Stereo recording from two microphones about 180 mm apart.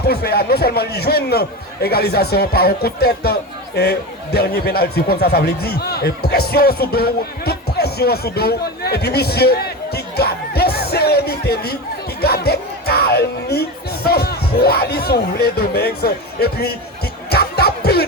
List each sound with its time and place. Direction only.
0.1 s a man's voice: 60° left (ahead or behind)
12.2 s music: 60° left (ahead or behind)